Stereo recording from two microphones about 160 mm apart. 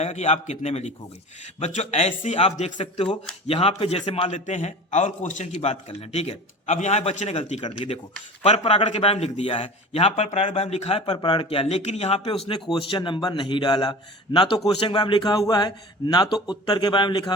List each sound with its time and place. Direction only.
0.0 s a man's voice: 45° left (ahead or behind); by 17.3 s 30° left (ahead or behind)